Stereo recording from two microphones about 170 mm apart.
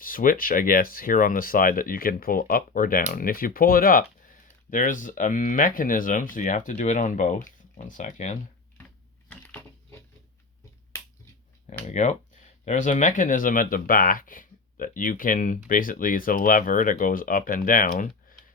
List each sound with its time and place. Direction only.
0.0 s speech: 55° left (ahead or behind)
9.3 s coin: 10° left (ahead or behind)
11.9 s speech: 45° left (ahead or behind)